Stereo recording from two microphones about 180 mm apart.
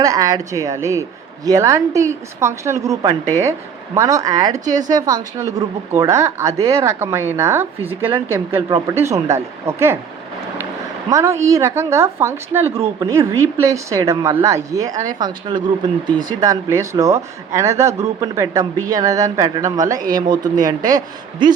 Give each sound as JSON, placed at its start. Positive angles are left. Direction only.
{"t": 0.0, "sound": "speech", "side_deg": -20}
{"t": 11.1, "sound": "speech", "side_deg": -15}